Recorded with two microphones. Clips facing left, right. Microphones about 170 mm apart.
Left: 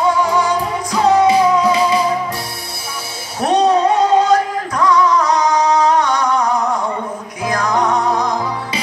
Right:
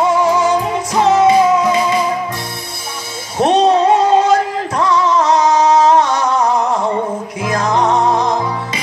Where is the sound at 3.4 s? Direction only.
25° right (ahead or behind).